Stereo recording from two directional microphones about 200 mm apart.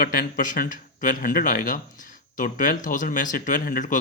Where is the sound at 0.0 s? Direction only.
45° left (ahead or behind).